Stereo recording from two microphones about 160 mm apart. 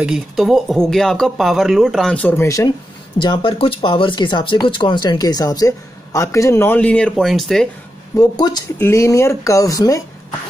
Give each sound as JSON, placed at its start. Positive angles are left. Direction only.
{"t": 0.0, "sound": "speech", "side_deg": 0}
{"t": 3.2, "sound": "speech", "side_deg": 30}
{"t": 8.2, "sound": "speech", "side_deg": 25}